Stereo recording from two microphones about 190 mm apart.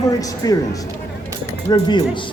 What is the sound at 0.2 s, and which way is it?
Speech, 20° left (ahead or behind).